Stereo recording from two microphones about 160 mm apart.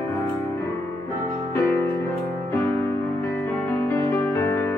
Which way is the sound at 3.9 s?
15° left (ahead or behind).